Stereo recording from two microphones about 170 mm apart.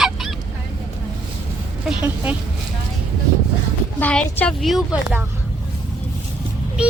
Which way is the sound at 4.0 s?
10° left (ahead or behind).